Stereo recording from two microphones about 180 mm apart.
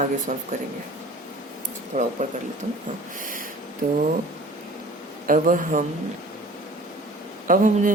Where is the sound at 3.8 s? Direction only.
40° right (ahead or behind).